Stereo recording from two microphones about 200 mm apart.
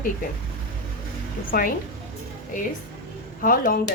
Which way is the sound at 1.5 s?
40° left (ahead or behind).